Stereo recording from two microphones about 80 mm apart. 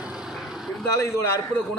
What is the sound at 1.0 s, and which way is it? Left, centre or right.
Speech, left.